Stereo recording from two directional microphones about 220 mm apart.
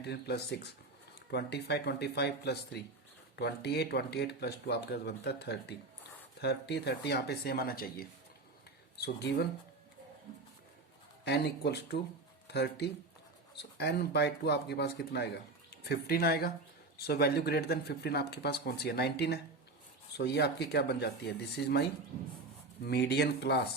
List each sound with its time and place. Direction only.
0.0 s speech: 50° left (ahead or behind)
11.3 s speech: 50° left (ahead or behind)
22.9 s speech: 50° left (ahead or behind)